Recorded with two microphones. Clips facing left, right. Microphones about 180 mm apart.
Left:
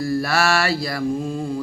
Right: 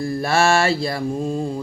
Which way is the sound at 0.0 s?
25° right (ahead or behind).